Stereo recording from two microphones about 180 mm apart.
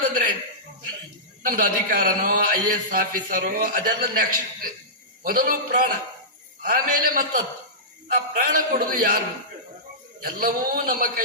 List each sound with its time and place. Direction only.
1.5 s a man's voice: 50° right (ahead or behind)
10.2 s a man's voice: 50° right (ahead or behind)